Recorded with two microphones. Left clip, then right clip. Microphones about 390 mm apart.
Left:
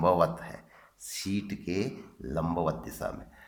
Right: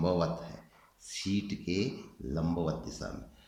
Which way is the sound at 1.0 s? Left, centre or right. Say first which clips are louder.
Left 1 dB; centre.